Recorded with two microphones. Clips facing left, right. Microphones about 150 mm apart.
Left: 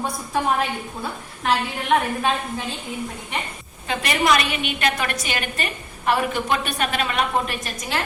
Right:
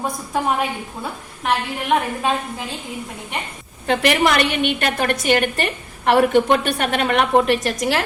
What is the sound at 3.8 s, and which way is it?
A woman's voice, 70° right (ahead or behind).